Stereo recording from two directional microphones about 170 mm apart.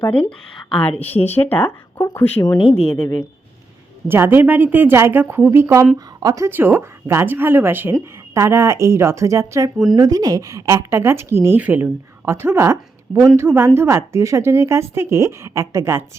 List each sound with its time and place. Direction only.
0.0 s speech: 10° left (ahead or behind)
2.1 s speech: 20° left (ahead or behind)
4.1 s a woman's voice: 15° right (ahead or behind)